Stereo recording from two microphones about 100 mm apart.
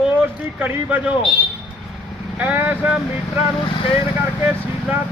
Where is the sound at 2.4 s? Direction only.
20° right (ahead or behind).